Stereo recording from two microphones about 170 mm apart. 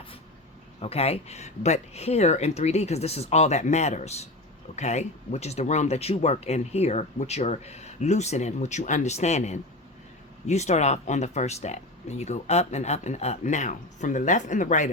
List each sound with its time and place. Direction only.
0.8 s speech: 35° left (ahead or behind)